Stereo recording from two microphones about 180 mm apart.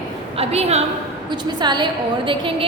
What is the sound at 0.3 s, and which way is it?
Speech, 35° right (ahead or behind).